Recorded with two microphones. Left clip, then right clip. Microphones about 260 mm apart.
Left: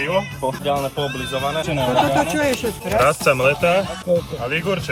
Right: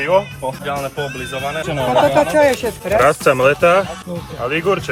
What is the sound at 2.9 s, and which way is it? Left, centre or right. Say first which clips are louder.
Speech: right 3 dB; right.